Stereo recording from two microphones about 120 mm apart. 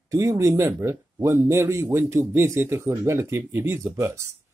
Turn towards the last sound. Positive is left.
turn(degrees=-25)  # may be behind; listen again after turning